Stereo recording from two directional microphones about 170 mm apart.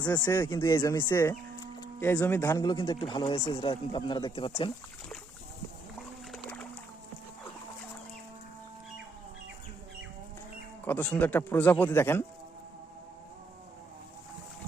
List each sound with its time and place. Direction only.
0.0 s speech: 25° left (ahead or behind)
6.3 s boat: 5° left (ahead or behind)
10.8 s speech: 10° left (ahead or behind)